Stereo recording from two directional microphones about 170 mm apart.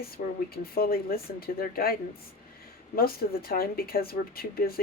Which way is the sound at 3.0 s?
60° left (ahead or behind).